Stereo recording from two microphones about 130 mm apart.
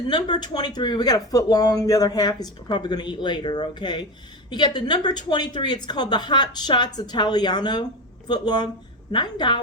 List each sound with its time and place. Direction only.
0.3 s speech: 35° left (ahead or behind)